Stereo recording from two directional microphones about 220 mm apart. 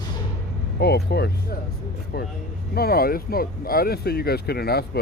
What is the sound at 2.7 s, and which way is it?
Speech, 45° left (ahead or behind).